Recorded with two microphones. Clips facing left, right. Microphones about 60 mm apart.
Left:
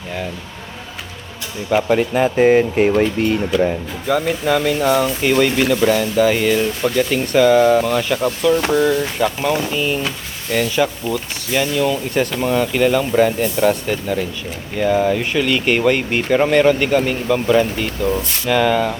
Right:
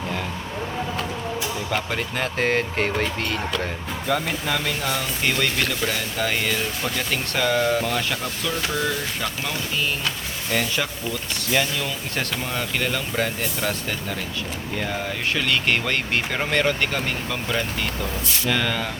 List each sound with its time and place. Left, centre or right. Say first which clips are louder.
1.7 s speech: left 14 dB; centre